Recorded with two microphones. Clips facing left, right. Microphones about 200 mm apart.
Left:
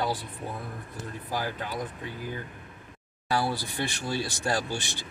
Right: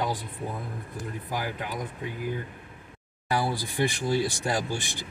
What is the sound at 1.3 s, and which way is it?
Speech, 15° right (ahead or behind).